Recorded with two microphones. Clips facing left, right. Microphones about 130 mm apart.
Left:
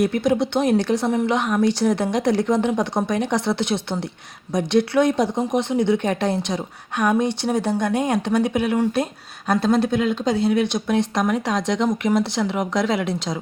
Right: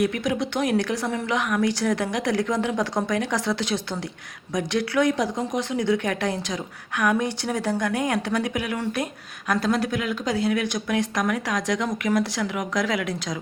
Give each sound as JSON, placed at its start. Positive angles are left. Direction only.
{"t": 0.0, "sound": "speech", "side_deg": 30}